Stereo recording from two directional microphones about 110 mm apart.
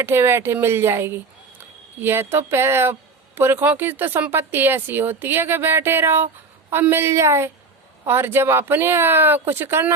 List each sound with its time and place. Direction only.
0.0 s speech: 20° right (ahead or behind)